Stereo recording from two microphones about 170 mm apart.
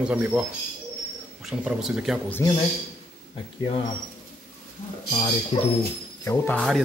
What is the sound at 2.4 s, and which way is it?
Speech, 20° left (ahead or behind).